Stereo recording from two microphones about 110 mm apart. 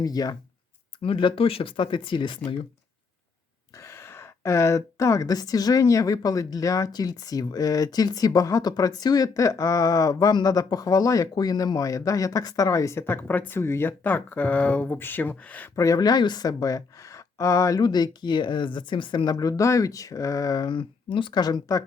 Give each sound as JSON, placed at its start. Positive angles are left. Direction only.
{"t": 0.0, "sound": "a woman's voice", "side_deg": 35}
{"t": 1.0, "sound": "speech", "side_deg": 55}
{"t": 3.8, "sound": "a woman's voice", "side_deg": 25}
{"t": 15.7, "sound": "a woman's voice", "side_deg": 30}